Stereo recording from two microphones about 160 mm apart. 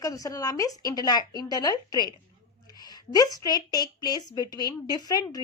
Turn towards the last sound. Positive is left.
turn(degrees=25)  # may be behind; listen again after turning